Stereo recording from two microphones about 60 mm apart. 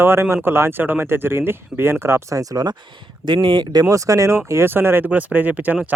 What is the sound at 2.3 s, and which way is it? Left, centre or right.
Speech, right.